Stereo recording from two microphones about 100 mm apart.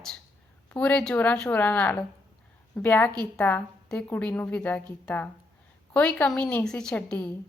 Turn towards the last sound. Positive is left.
turn(degrees=15)  # may be behind; listen again after turning